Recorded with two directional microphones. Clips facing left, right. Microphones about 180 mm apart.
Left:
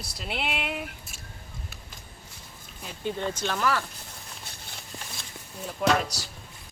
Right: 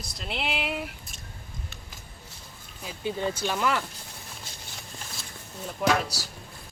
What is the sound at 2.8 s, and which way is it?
Speech, 10° right (ahead or behind).